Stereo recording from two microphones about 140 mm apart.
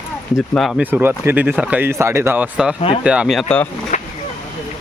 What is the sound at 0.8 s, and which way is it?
Speech, 15° right (ahead or behind).